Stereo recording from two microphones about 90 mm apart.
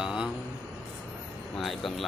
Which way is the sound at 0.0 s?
10° right (ahead or behind).